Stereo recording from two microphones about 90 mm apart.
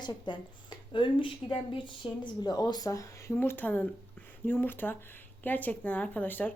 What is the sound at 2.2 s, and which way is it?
Speech, 50° left (ahead or behind).